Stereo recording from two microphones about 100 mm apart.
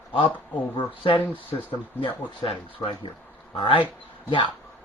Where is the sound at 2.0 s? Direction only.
65° left (ahead or behind).